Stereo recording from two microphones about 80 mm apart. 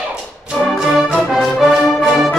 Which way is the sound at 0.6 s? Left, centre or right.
Centre.